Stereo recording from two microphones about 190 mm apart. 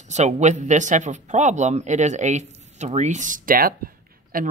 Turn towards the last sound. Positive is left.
turn(degrees=-45)  # may be behind; listen again after turning